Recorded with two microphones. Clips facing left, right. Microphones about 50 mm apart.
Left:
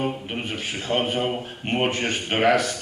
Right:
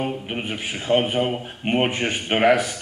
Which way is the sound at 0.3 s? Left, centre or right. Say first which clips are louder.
Right 1 dB; centre.